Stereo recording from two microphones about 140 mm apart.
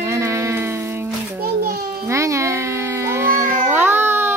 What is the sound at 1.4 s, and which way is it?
Children playing, 90° right.